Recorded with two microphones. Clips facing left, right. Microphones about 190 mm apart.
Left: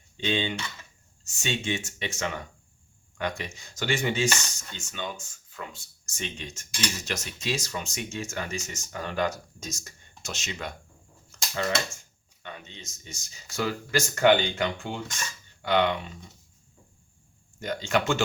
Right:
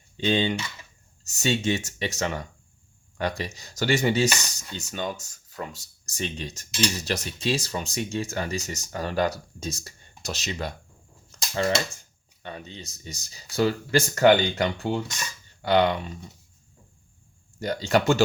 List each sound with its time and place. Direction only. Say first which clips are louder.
0.3 s speech: right 5 dB; 40° right (ahead or behind)
11.3 s a sound: right 4 dB; 30° right (ahead or behind)
12.4 s speech: right 5 dB; 35° right (ahead or behind)
17.6 s speech: right 4 dB; 35° right (ahead or behind)